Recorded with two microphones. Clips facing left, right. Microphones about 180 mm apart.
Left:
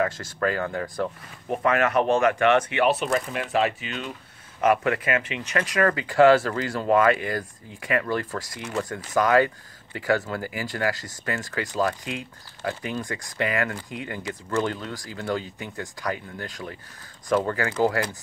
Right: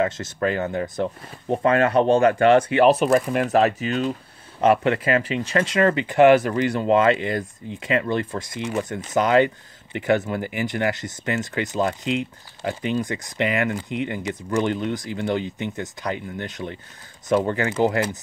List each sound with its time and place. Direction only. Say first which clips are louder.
0.0 s speech: right 2 dB; 20° right (ahead or behind); by 4.1 s 40° right (ahead or behind)
4.6 s speech: right 3 dB; 30° right (ahead or behind)